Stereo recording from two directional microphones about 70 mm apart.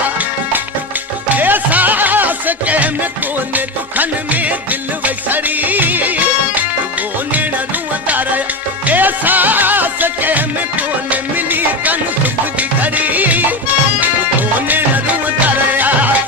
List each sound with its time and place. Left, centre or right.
1.3 s music: right
8.9 s music: right